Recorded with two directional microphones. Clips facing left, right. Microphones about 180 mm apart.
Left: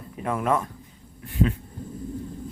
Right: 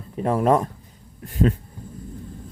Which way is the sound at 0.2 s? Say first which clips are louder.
Right 6 dB; 35° right (ahead or behind).